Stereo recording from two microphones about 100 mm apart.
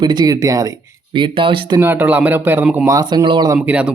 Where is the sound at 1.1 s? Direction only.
55° right (ahead or behind).